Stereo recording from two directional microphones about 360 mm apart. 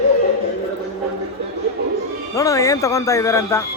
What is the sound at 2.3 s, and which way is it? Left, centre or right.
Speech, centre.